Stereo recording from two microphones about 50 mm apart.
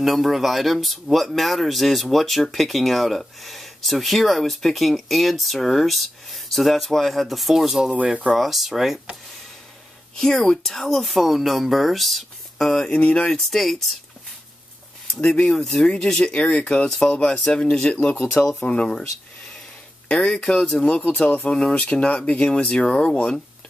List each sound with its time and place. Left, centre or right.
0.0 s speech: centre
7.9 s speech: right
8.3 s speech: centre
10.1 s speech: centre
12.9 s speech: left
13.3 s speech: centre
15.1 s speech: centre
18.6 s speech: left
20.1 s speech: centre